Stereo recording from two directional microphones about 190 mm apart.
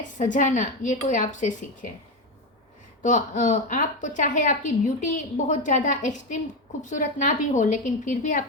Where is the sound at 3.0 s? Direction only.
40° left (ahead or behind).